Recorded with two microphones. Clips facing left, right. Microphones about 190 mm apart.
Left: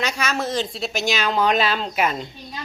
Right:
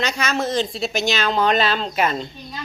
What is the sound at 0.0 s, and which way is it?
Speech, 5° left (ahead or behind).